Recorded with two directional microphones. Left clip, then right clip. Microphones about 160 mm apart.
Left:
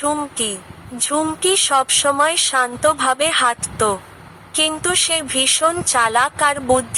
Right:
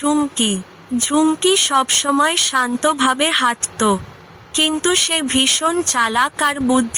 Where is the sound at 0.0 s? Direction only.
35° right (ahead or behind).